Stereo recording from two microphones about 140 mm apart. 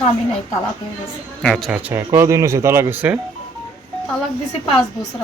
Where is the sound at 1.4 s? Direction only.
Centre (ahead or behind).